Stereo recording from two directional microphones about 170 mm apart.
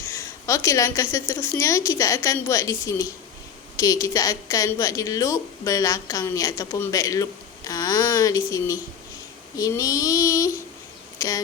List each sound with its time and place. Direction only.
0.0 s a woman's voice: 15° left (ahead or behind)